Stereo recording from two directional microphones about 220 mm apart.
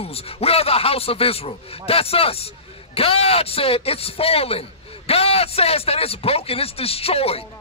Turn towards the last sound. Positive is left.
turn(degrees=25)  # may be behind; listen again after turning